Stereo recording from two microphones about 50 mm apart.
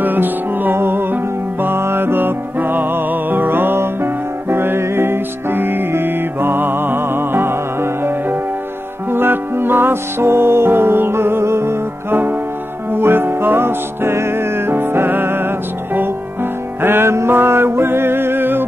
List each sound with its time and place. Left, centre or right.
0.0 s music: right
12.9 s music: right
17.3 s music: right